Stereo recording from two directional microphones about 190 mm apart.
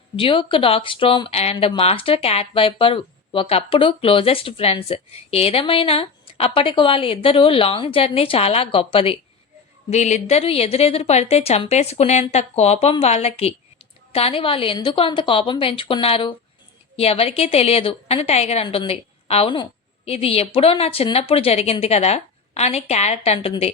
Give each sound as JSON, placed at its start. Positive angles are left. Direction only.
{"t": 0.2, "sound": "a woman's voice", "side_deg": 25}